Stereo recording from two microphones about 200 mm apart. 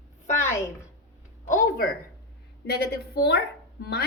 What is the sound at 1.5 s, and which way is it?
Speech, 40° left (ahead or behind).